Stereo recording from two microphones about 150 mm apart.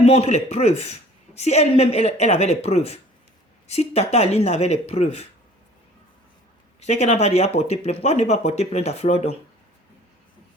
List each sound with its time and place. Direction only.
0.0 s a man's voice: 40° left (ahead or behind)
6.7 s a man's voice: 45° left (ahead or behind)